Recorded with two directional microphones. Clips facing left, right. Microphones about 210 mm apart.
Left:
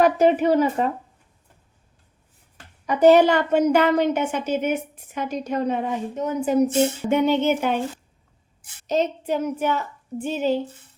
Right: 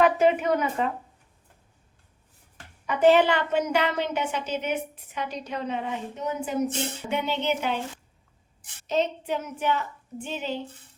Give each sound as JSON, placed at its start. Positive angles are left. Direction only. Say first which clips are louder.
{"t": 0.0, "sound": "a woman's voice", "louder": "left 4 dB", "side_deg": 40}
{"t": 2.8, "sound": "a woman's voice", "louder": "left 5 dB", "side_deg": 40}
{"t": 8.9, "sound": "a woman's voice", "louder": "left 4 dB", "side_deg": 40}